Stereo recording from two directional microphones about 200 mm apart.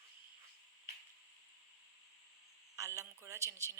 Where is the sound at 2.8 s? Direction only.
15° right (ahead or behind).